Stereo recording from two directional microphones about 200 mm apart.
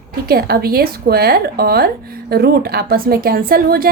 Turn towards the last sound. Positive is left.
turn(degrees=-50)  # may be behind; listen again after turning